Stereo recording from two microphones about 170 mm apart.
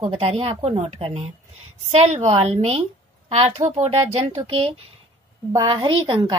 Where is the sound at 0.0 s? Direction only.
35° right (ahead or behind).